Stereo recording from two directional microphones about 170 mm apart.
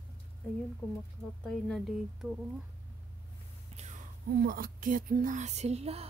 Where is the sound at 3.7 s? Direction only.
40° right (ahead or behind).